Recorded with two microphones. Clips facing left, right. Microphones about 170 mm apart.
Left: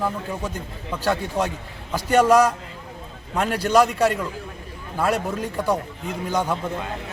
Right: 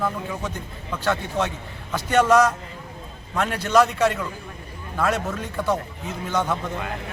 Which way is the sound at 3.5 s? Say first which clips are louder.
Left 4 dB; 35° left (ahead or behind).